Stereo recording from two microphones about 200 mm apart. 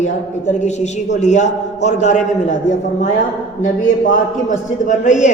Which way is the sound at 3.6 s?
40° left (ahead or behind).